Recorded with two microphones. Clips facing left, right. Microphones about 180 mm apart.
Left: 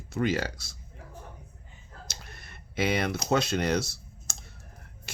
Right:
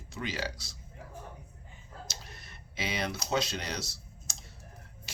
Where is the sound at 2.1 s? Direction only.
55° left (ahead or behind).